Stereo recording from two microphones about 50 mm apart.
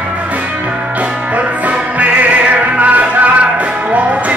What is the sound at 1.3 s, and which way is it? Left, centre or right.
Music, right.